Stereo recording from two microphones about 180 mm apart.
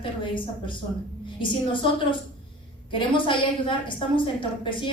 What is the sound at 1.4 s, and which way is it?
Speech, 30° left (ahead or behind).